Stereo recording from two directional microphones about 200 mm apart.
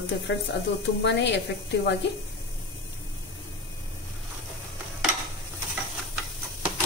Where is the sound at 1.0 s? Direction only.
60° left (ahead or behind).